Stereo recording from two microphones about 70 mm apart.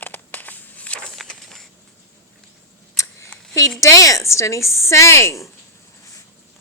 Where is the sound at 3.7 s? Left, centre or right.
Left.